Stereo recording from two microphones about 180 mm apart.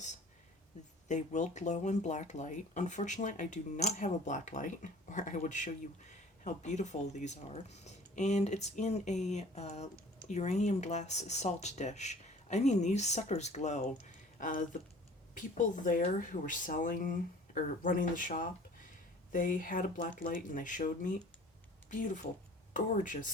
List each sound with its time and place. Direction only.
1.0 s speech: 40° left (ahead or behind)